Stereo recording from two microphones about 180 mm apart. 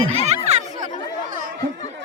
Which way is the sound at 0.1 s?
35° right (ahead or behind).